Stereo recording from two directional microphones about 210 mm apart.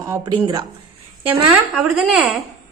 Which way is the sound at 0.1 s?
20° right (ahead or behind).